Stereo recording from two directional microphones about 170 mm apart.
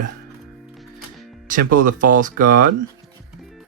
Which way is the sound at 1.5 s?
50° right (ahead or behind).